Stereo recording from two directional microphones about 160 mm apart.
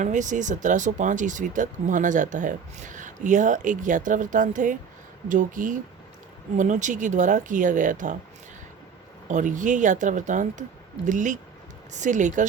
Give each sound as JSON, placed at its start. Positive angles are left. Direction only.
{"t": 0.0, "sound": "speech", "side_deg": -50}
{"t": 9.3, "sound": "speech", "side_deg": -50}